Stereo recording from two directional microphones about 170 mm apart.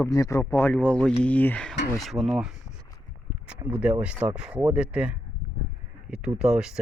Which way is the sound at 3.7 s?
5° right (ahead or behind).